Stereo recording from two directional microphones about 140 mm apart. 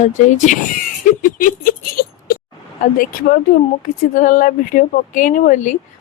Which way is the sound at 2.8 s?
90° left.